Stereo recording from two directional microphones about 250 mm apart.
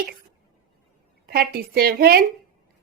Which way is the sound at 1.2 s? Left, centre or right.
Right.